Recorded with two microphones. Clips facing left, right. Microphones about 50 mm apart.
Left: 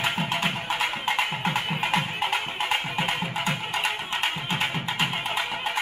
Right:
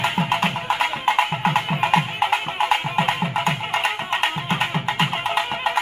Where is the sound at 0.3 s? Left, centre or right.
Right.